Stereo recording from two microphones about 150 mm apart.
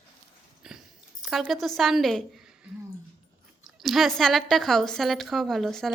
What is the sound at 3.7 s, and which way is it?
A woman's voice, centre (ahead or behind).